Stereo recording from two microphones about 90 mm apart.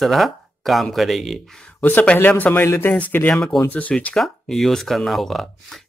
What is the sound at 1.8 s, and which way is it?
Speech, 20° left (ahead or behind).